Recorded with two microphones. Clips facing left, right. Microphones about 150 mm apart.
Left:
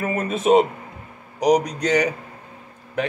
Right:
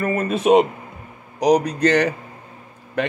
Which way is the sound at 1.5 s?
10° left (ahead or behind).